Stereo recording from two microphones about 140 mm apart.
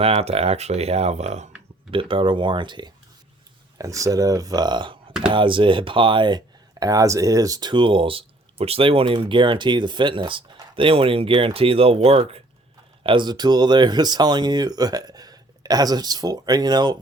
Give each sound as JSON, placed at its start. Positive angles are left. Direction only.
{"t": 0.0, "sound": "speech", "side_deg": -45}
{"t": 1.9, "sound": "speech", "side_deg": -40}
{"t": 3.8, "sound": "speech", "side_deg": -25}
{"t": 13.0, "sound": "speech", "side_deg": -35}